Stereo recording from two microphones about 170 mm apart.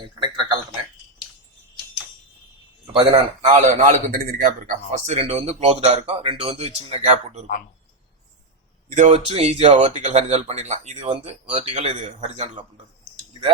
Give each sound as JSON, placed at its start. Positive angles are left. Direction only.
{"t": 0.0, "sound": "a sound", "side_deg": -30}
{"t": 2.9, "sound": "a man's voice", "side_deg": -30}
{"t": 3.5, "sound": "a man's voice", "side_deg": -50}
{"t": 8.9, "sound": "speech", "side_deg": -45}
{"t": 9.1, "sound": "a man's voice", "side_deg": -35}